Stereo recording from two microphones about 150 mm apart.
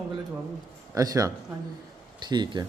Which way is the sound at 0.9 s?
25° right (ahead or behind).